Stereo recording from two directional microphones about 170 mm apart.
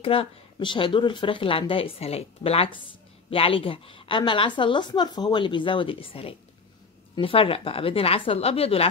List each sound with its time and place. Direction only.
0.0 s a woman's voice: 35° left (ahead or behind)